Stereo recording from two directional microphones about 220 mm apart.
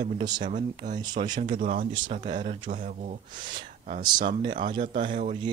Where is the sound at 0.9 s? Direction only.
20° right (ahead or behind).